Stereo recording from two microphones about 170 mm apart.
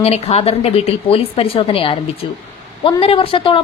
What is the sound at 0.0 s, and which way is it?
A woman's voice, 35° left (ahead or behind).